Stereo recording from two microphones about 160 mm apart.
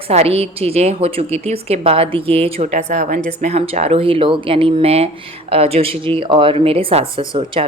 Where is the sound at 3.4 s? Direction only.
40° right (ahead or behind).